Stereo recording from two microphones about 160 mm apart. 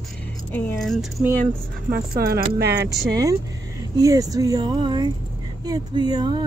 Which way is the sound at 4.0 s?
20° right (ahead or behind).